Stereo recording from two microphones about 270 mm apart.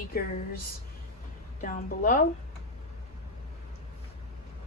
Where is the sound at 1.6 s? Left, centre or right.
Left.